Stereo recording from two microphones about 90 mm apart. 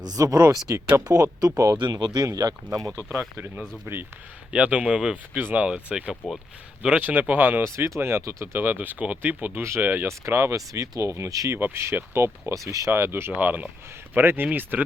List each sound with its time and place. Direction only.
0.0 s speech: 45° right (ahead or behind)
1.8 s speech: 55° right (ahead or behind)
3.1 s speech: 25° right (ahead or behind)
4.5 s speech: 10° right (ahead or behind)
7.7 s speech: 30° right (ahead or behind)
12.9 s speech: 25° right (ahead or behind)